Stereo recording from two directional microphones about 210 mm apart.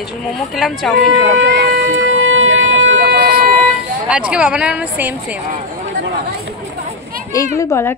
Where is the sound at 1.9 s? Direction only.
70° right (ahead or behind).